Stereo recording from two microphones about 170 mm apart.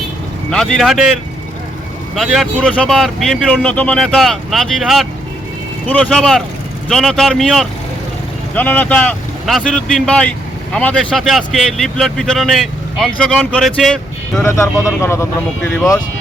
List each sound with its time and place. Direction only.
0.5 s speech: 5° left (ahead or behind)
2.1 s speech: centre (ahead or behind)
14.4 s speech: 15° left (ahead or behind)